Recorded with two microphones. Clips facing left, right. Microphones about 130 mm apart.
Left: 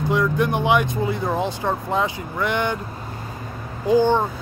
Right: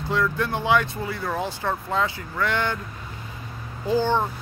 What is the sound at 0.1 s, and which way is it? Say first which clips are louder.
Speech: left 3 dB; 15° left (ahead or behind).